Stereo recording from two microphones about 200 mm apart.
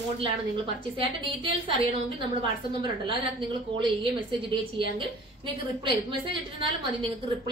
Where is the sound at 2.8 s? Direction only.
25° right (ahead or behind).